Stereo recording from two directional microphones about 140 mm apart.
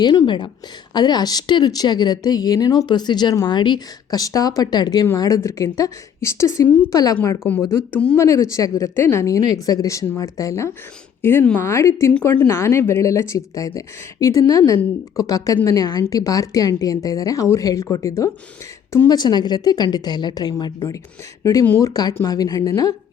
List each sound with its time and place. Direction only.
0.0 s a woman's voice: 30° left (ahead or behind)
6.9 s speech: 25° left (ahead or behind)
7.3 s speech: 15° left (ahead or behind)
8.2 s speech: 20° left (ahead or behind)
21.4 s speech: 20° left (ahead or behind)